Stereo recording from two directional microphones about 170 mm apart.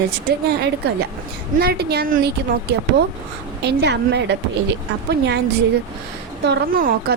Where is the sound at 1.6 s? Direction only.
65° right (ahead or behind).